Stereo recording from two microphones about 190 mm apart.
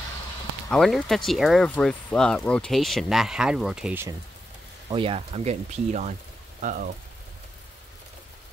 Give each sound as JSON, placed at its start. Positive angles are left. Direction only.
{"t": 0.7, "sound": "speech", "side_deg": 0}
{"t": 4.9, "sound": "speech", "side_deg": -30}